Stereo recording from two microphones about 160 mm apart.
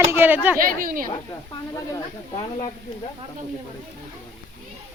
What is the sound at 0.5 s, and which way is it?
Speech, 60° right (ahead or behind).